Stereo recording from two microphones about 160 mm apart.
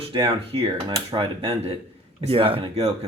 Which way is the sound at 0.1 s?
30° right (ahead or behind).